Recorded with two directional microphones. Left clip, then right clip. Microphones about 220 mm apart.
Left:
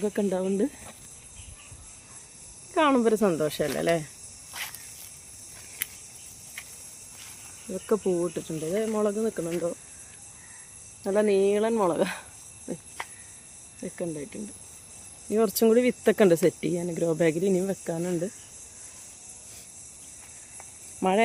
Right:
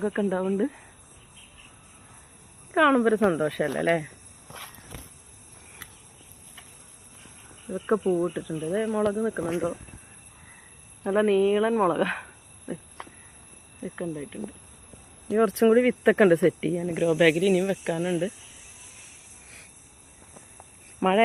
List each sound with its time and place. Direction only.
0.0 s speech: 15° left (ahead or behind)
2.7 s speech: 20° left (ahead or behind)
7.7 s speech: centre (ahead or behind)
11.0 s speech: 15° left (ahead or behind)
13.0 s cricket: 10° left (ahead or behind)
13.9 s speech: 15° left (ahead or behind)
21.0 s speech: 5° left (ahead or behind)